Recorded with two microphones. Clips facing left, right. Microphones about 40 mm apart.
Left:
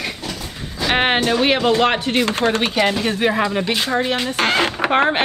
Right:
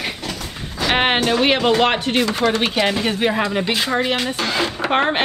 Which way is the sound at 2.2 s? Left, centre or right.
Left.